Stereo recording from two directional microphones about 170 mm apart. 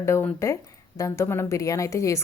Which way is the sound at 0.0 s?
15° left (ahead or behind).